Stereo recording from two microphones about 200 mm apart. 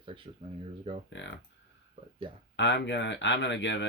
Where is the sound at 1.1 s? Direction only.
65° left (ahead or behind).